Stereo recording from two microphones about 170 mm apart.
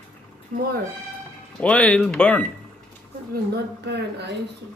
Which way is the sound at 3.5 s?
85° right.